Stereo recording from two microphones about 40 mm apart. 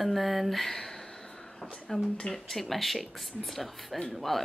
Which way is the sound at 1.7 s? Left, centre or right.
Centre.